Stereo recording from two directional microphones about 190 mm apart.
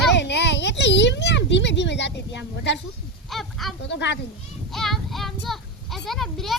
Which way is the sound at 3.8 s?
70° left (ahead or behind).